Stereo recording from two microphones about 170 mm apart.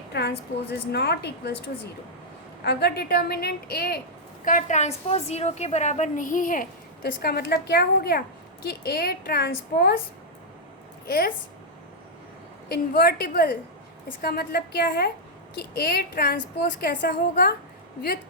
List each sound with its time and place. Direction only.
0.1 s a woman's voice: 75° left (ahead or behind)
4.4 s a woman's voice: 45° left (ahead or behind)
7.0 s a woman's voice: 70° left (ahead or behind)
12.6 s a woman's voice: 65° left (ahead or behind)